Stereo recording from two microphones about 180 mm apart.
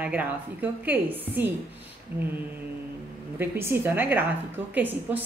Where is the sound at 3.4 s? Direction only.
10° right (ahead or behind).